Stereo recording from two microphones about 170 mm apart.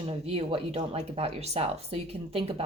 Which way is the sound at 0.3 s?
35° right (ahead or behind).